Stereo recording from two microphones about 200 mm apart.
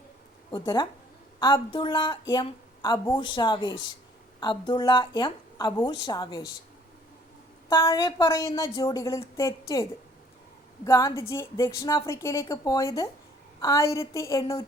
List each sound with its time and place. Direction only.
0.5 s speech: 20° left (ahead or behind)
7.7 s a woman's voice: 15° left (ahead or behind)
10.8 s a woman's voice: 15° left (ahead or behind)